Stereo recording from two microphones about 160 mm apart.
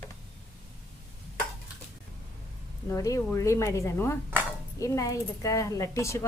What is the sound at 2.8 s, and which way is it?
Speech, 20° left (ahead or behind).